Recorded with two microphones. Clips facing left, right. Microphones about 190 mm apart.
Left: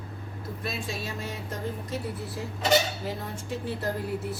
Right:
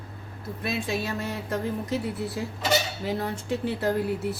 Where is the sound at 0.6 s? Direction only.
65° right (ahead or behind).